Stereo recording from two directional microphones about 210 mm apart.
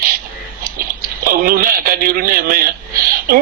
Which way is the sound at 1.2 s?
45° right (ahead or behind).